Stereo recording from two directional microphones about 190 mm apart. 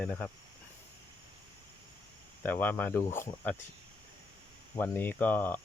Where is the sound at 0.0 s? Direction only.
10° left (ahead or behind).